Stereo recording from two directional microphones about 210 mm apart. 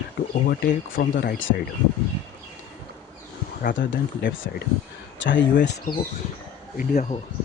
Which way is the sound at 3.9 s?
65° left (ahead or behind).